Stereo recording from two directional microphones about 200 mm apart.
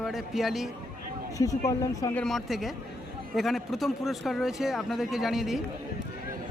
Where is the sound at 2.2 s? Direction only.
Centre (ahead or behind).